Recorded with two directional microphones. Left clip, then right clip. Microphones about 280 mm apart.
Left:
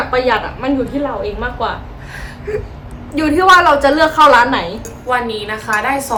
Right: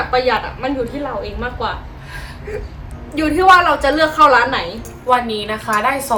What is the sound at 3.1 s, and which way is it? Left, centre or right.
A woman's voice, centre.